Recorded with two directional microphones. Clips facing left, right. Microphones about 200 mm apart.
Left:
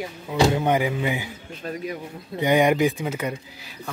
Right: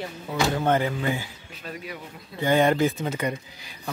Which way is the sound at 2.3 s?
15° left (ahead or behind).